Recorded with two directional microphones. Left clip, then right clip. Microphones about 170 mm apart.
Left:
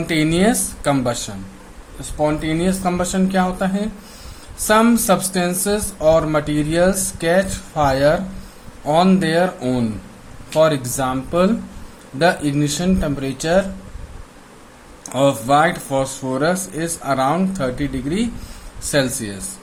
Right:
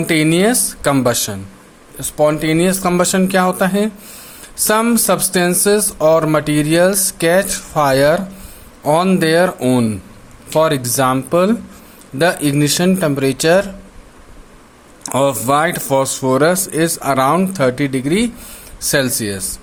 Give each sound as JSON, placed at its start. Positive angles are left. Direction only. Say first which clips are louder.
{"t": 0.1, "sound": "speech", "louder": "right 4 dB", "side_deg": -40}
{"t": 15.0, "sound": "speech", "louder": "right 2 dB", "side_deg": -45}